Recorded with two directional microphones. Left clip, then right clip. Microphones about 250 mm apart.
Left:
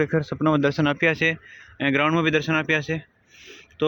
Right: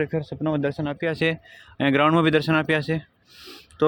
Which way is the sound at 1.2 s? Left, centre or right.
Centre.